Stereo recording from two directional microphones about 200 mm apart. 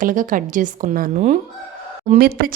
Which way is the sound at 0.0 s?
40° right (ahead or behind).